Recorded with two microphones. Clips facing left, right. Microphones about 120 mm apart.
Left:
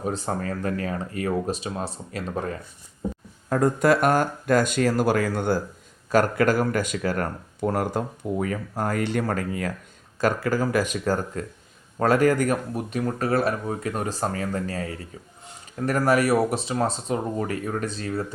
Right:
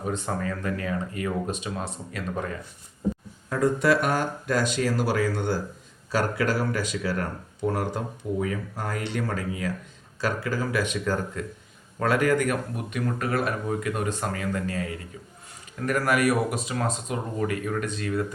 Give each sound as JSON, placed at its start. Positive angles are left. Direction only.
{"t": 0.0, "sound": "speech", "side_deg": 35}
{"t": 3.5, "sound": "speech", "side_deg": 45}